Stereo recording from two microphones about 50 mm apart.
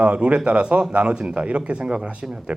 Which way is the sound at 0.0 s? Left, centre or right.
Right.